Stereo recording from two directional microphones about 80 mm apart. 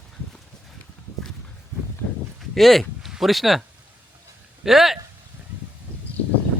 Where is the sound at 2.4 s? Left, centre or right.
Centre.